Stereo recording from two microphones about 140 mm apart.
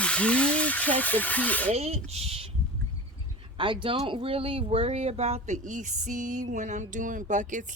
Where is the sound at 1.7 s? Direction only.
50° right (ahead or behind).